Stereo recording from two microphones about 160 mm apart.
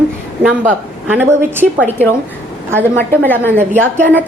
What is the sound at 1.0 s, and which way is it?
A woman's voice, 10° right (ahead or behind).